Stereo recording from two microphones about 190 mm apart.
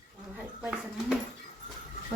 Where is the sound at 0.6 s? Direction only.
5° right (ahead or behind).